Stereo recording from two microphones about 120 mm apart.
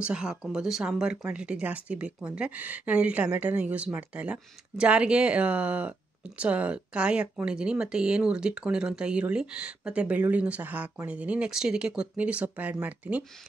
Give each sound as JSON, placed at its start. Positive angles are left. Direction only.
{"t": 0.0, "sound": "speech", "side_deg": -5}